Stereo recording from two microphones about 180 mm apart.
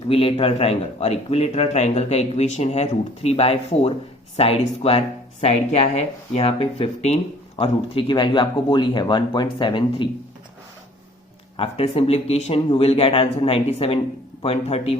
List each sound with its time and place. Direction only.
0.1 s speech: 30° left (ahead or behind)
11.5 s speech: 30° left (ahead or behind)